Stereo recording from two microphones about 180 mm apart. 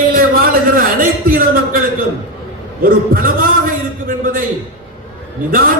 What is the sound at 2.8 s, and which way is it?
A man's voice, 55° right (ahead or behind).